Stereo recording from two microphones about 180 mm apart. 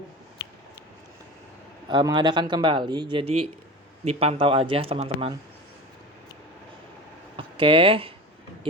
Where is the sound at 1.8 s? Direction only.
25° right (ahead or behind).